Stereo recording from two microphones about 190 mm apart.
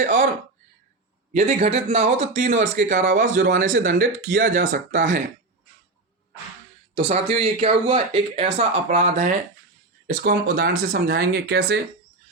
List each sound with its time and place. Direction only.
0.0 s a sound: 45° right (ahead or behind)
1.3 s speech: 40° right (ahead or behind)
6.9 s speech: 35° right (ahead or behind)
10.1 s speech: 50° right (ahead or behind)